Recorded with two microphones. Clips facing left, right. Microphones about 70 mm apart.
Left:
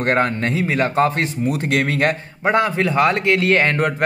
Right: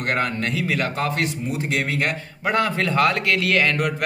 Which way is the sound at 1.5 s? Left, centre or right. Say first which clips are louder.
Left 5 dB; left.